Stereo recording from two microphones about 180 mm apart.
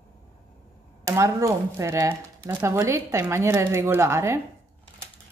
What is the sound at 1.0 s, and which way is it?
Speech, 15° right (ahead or behind).